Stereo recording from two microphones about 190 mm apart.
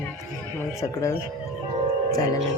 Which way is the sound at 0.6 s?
15° left (ahead or behind).